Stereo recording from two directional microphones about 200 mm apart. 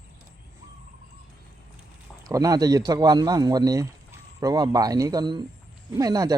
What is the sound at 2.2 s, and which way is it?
A man's voice, 15° right (ahead or behind).